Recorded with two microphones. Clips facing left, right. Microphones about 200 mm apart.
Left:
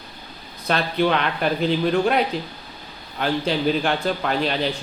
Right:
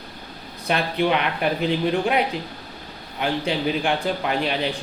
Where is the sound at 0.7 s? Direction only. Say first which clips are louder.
Left 1 dB; 15° right (ahead or behind).